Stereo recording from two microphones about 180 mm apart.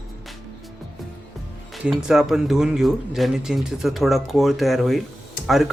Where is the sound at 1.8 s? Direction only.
5° right (ahead or behind).